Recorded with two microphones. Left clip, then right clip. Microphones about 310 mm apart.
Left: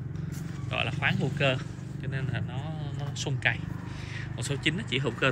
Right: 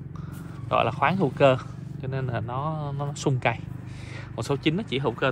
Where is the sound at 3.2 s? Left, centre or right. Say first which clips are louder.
Right 3 dB; centre.